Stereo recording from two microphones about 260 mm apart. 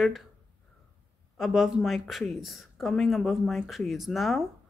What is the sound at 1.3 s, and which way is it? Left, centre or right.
Speech, centre.